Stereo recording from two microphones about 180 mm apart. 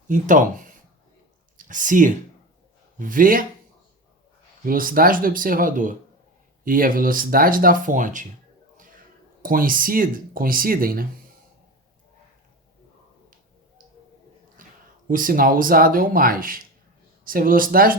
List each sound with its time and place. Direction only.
0.1 s speech: 45° right (ahead or behind)
4.6 s speech: 50° right (ahead or behind)
9.4 s speech: 50° right (ahead or behind)
14.6 s a sound: 45° right (ahead or behind)
15.0 s speech: 50° right (ahead or behind)